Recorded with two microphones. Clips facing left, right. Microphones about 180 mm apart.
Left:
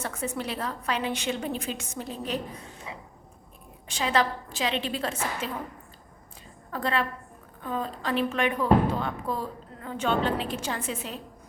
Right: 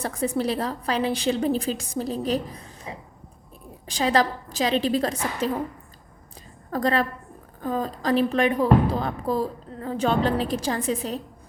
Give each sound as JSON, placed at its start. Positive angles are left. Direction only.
{"t": 0.0, "sound": "speech", "side_deg": -35}
{"t": 6.7, "sound": "speech", "side_deg": -40}